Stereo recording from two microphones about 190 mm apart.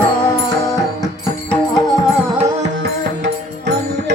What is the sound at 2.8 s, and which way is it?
Music, 70° right (ahead or behind).